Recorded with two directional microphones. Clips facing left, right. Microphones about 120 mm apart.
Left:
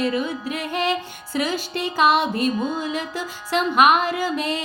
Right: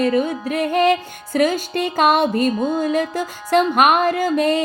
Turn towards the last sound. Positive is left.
turn(degrees=-45)  # may be behind; listen again after turning